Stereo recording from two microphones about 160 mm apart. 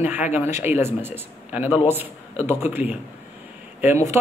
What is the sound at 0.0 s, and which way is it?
A man's voice, 10° right (ahead or behind).